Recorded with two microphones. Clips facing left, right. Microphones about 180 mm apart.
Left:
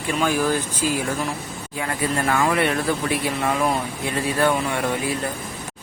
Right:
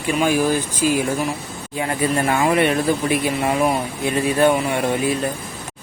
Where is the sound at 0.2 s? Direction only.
15° right (ahead or behind).